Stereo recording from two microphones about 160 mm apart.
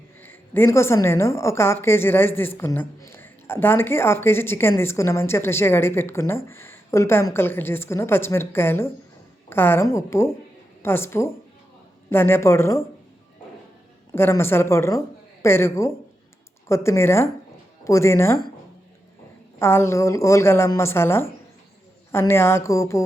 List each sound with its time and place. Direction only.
0.2 s a woman's voice: 15° left (ahead or behind)
14.2 s a woman's voice: 15° left (ahead or behind)
19.5 s a woman's voice: 15° left (ahead or behind)